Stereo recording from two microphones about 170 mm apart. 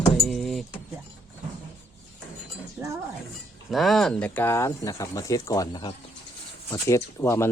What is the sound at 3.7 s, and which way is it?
Speech, centre (ahead or behind).